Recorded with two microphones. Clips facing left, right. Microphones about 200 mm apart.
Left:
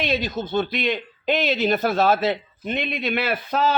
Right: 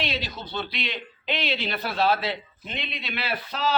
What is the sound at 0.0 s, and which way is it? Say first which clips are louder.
Speech: left 7 dB; 50° left (ahead or behind).